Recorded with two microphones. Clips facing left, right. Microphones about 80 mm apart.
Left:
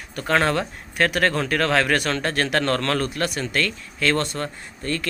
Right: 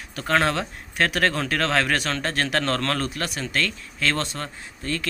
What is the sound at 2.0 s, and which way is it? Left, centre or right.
Speech, left.